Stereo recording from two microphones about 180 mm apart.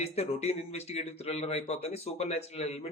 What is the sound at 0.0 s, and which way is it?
Speech, 35° left (ahead or behind).